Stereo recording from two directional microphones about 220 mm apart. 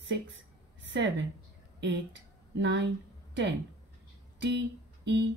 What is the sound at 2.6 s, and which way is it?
Speech, 50° right (ahead or behind).